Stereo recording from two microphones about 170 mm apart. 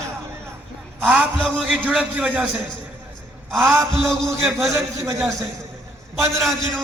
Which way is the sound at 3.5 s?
Centre (ahead or behind).